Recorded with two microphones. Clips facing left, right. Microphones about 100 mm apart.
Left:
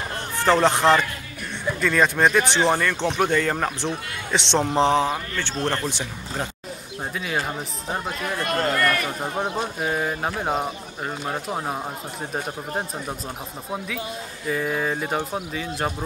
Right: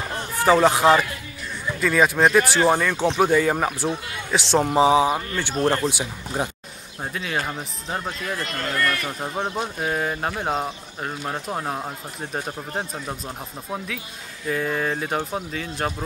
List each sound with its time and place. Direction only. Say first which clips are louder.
0.4 s a man's voice: right 2 dB; 5° right (ahead or behind)
7.2 s a man's voice: even; centre (ahead or behind)
8.5 s speech: left 4 dB; 40° left (ahead or behind)
9.2 s a man's voice: left 1 dB; 5° left (ahead or behind)
14.5 s a man's voice: even; centre (ahead or behind)